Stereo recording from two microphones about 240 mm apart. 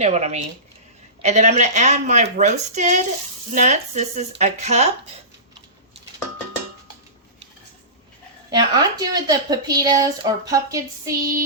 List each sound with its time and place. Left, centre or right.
0.0 s a woman's voice: right
8.4 s a woman's voice: centre